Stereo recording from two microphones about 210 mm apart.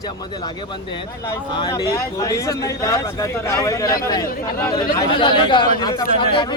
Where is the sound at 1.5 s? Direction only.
20° left (ahead or behind).